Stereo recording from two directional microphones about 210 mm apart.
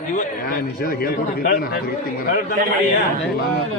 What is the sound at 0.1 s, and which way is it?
A man's voice, 35° left (ahead or behind).